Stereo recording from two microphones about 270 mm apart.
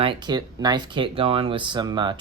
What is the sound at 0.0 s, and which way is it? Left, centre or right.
Speech, centre.